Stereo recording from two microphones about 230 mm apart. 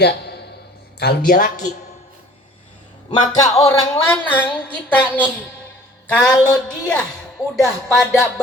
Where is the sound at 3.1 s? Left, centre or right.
Centre.